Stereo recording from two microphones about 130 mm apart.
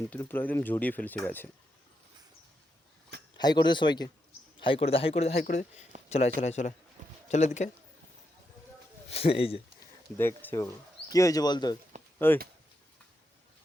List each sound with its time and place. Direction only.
0.3 s speech: 15° left (ahead or behind)
3.3 s speech: 35° left (ahead or behind)
4.6 s speech: 45° left (ahead or behind)
5.5 s speech: 65° left (ahead or behind)
6.1 s speech: 55° left (ahead or behind)
9.0 s speech: 50° left (ahead or behind)
10.2 s speech: 15° left (ahead or behind); by 11.8 s 35° left (ahead or behind)
12.2 s speech: 15° left (ahead or behind)